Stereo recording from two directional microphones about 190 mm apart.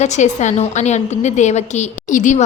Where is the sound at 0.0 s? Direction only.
35° left (ahead or behind).